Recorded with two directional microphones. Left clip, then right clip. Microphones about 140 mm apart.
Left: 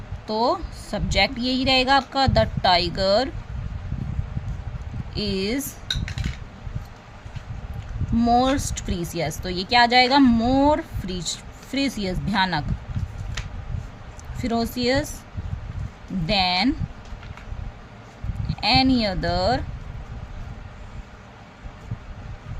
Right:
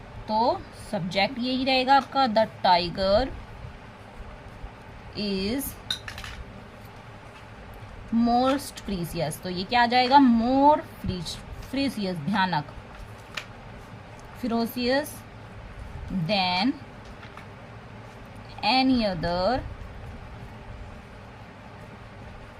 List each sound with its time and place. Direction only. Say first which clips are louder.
0.3 s speech: left 2 dB; 40° left (ahead or behind)
5.1 s speech: left 4 dB; 35° left (ahead or behind)
8.2 s speech: left 4 dB; 35° left (ahead or behind)
14.4 s speech: left 4 dB; 30° left (ahead or behind)
16.2 s speech: left 4 dB; 30° left (ahead or behind)
18.6 s speech: left 3 dB; 30° left (ahead or behind)